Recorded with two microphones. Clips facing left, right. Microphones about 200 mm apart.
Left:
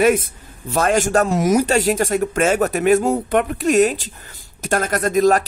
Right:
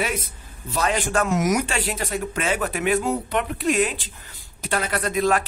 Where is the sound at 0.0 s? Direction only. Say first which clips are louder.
Left 11 dB; 50° left (ahead or behind).